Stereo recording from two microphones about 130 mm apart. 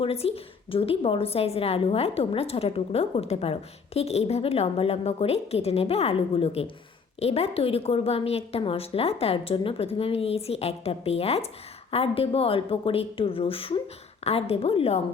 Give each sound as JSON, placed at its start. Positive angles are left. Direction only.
{"t": 0.0, "sound": "a woman's voice", "side_deg": 50}